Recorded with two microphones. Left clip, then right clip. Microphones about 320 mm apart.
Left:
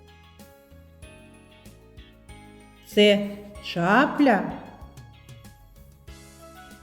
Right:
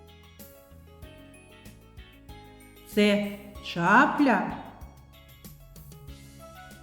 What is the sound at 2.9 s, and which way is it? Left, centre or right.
A woman's voice, centre.